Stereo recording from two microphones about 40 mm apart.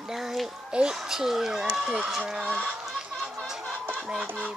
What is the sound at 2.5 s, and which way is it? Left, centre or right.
Fowl, centre.